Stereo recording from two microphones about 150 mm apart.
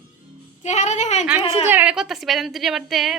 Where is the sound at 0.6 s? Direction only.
50° left (ahead or behind).